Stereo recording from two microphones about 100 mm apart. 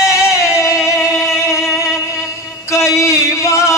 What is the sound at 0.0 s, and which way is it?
Music, 30° left (ahead or behind).